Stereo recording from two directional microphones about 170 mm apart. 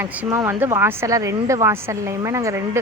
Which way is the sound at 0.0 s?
10° right (ahead or behind).